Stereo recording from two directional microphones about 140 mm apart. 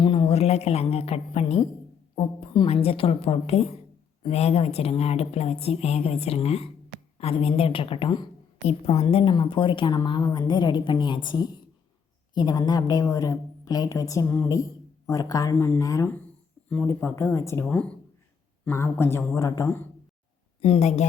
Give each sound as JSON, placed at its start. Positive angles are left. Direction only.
{"t": 0.0, "sound": "speech", "side_deg": 35}
{"t": 2.1, "sound": "a woman's voice", "side_deg": 35}
{"t": 20.6, "sound": "speech", "side_deg": 45}